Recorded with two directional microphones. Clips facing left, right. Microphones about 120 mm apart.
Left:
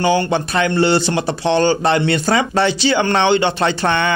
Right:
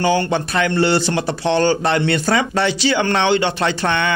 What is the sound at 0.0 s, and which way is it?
A man's voice, 20° left (ahead or behind).